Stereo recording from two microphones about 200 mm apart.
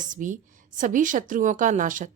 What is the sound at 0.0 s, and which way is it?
A woman's voice, 40° right (ahead or behind).